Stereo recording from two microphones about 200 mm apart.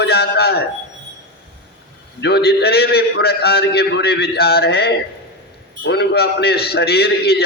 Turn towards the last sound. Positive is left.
turn(degrees=50)  # may be behind; listen again after turning